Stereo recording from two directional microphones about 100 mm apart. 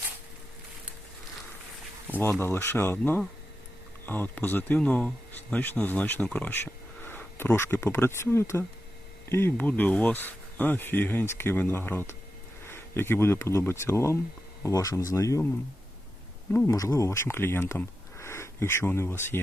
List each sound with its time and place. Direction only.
2.4 s speech: 25° left (ahead or behind)
16.6 s speech: 35° left (ahead or behind)